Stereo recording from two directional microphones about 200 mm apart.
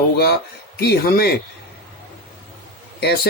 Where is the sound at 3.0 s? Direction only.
50° left (ahead or behind).